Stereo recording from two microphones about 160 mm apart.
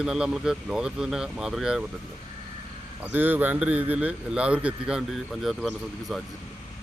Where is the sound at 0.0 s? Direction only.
5° right (ahead or behind).